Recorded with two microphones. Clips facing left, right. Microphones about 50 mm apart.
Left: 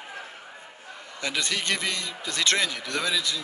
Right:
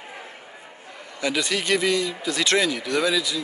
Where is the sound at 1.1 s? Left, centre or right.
Centre.